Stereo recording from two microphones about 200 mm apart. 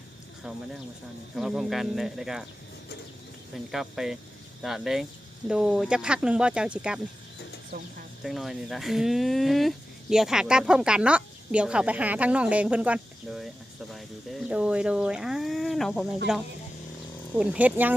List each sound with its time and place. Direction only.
1.4 s speech: centre (ahead or behind)
3.5 s speech: centre (ahead or behind)
7.7 s speech: 55° right (ahead or behind)
8.2 s speech: centre (ahead or behind)